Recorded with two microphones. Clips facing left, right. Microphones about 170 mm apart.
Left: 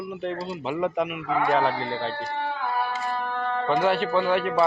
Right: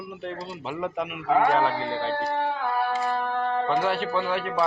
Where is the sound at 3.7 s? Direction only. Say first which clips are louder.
Left 7 dB; centre (ahead or behind).